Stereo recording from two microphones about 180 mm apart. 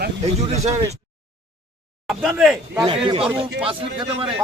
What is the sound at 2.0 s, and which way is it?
Speech, centre (ahead or behind).